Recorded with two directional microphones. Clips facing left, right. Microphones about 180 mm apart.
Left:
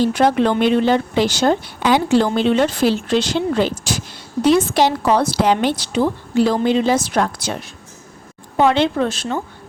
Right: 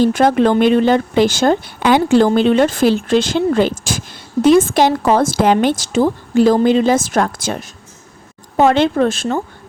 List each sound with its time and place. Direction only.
0.0 s speech: 50° right (ahead or behind)
8.5 s speech: 45° right (ahead or behind)